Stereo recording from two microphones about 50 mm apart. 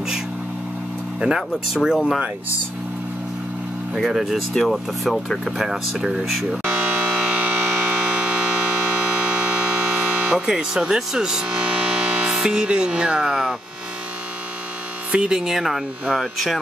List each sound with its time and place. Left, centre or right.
1.2 s speech: centre
3.9 s speech: centre
6.3 s music: right
11.4 s music: right
12.4 s speech: centre
15.0 s speech: centre